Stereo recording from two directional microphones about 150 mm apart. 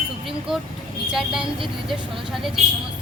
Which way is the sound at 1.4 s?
Centre (ahead or behind).